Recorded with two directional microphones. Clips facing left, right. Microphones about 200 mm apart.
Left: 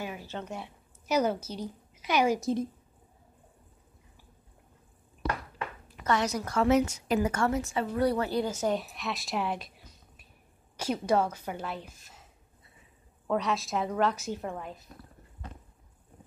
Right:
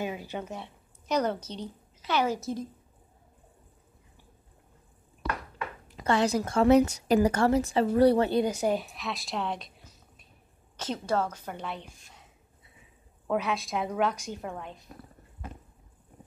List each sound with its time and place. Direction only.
0.0 s speech: 20° right (ahead or behind)
0.5 s a woman's voice: 5° left (ahead or behind)
5.9 s a woman's voice: 30° right (ahead or behind); by 8.7 s 15° right (ahead or behind)
8.7 s a woman's voice: centre (ahead or behind)
13.3 s a woman's voice: 5° right (ahead or behind)